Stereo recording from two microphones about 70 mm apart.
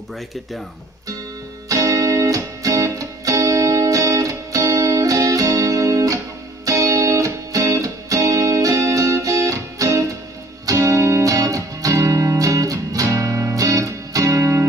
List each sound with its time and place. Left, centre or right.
1.7 s music: right